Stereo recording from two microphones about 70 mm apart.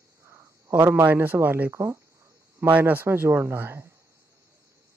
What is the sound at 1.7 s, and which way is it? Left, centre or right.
Speech, right.